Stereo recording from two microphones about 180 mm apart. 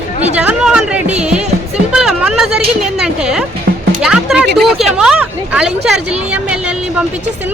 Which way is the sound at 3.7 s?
90° right.